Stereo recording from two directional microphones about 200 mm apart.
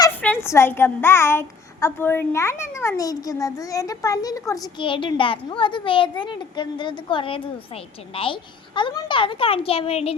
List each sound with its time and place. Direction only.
0.2 s a woman's voice: 10° left (ahead or behind); by 10.2 s 30° left (ahead or behind)